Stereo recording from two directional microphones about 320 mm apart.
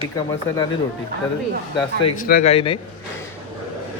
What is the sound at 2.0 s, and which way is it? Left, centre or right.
Speech, left.